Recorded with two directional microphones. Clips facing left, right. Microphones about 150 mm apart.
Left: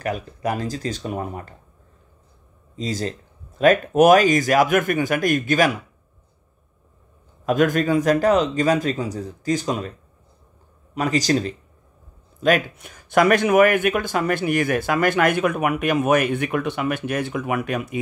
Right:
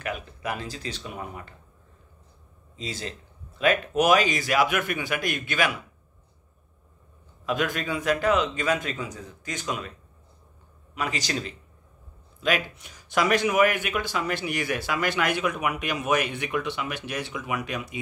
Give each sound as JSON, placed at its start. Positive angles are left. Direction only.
{"t": 0.0, "sound": "speech", "side_deg": 40}
{"t": 2.7, "sound": "speech", "side_deg": 40}
{"t": 7.4, "sound": "speech", "side_deg": 45}
{"t": 11.0, "sound": "speech", "side_deg": 40}